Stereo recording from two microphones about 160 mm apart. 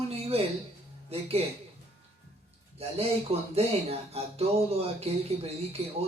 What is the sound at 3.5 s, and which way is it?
A man's voice, 40° right (ahead or behind).